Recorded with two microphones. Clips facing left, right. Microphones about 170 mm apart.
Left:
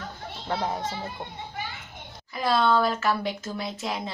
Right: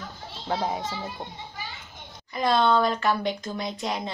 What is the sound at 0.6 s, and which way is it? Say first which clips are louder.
Speech: right 1 dB; 5° right (ahead or behind).